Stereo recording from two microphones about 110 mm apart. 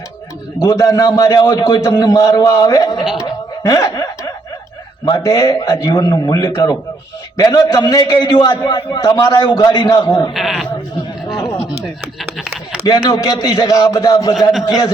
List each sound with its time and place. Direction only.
0.6 s a man's voice: 35° left (ahead or behind)
3.6 s snicker: 30° left (ahead or behind)
5.0 s a man's voice: 30° left (ahead or behind)
10.0 s speech: 45° left (ahead or behind)
10.3 s speech: 5° right (ahead or behind)
12.8 s a man's voice: 35° left (ahead or behind)